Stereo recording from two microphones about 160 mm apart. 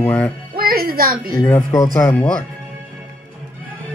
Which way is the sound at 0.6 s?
65° right (ahead or behind).